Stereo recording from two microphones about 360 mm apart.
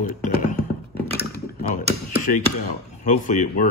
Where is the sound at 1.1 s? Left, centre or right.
Left.